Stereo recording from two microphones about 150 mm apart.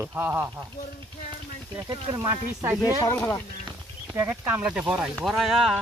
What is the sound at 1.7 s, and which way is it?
Speech, 30° right (ahead or behind).